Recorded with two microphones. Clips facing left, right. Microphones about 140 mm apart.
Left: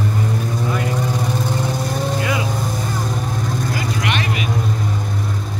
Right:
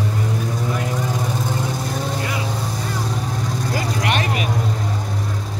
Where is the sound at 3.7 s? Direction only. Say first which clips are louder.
Right 4 dB; 35° right (ahead or behind).